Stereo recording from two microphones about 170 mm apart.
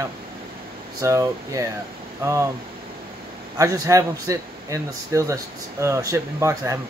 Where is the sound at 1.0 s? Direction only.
20° right (ahead or behind).